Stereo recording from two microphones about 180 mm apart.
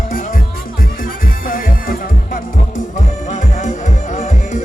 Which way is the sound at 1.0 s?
50° left (ahead or behind).